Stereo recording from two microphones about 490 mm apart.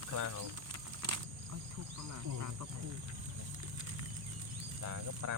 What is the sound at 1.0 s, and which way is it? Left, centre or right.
Insect, right.